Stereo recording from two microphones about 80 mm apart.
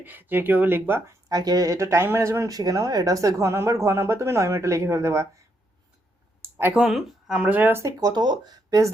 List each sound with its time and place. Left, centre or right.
0.0 s speech: right
1.3 s speech: right
2.6 s speech: right
6.7 s speech: centre
7.7 s speech: right
7.9 s speech: right